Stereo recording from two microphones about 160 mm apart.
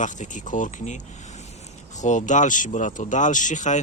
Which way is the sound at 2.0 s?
50° left (ahead or behind).